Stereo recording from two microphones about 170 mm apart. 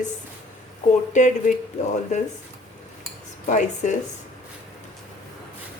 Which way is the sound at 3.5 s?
45° left (ahead or behind).